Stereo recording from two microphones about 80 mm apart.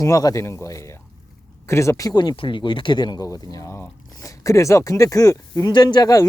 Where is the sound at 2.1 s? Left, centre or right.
Left.